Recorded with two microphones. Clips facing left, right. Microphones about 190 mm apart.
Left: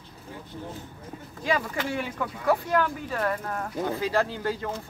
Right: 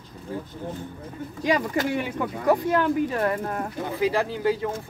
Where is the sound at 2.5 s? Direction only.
20° right (ahead or behind).